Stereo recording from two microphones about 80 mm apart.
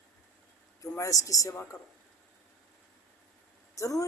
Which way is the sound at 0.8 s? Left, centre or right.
Left.